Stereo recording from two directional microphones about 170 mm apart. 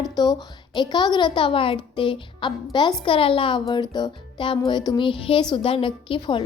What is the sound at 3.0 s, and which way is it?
Speech, 30° left (ahead or behind).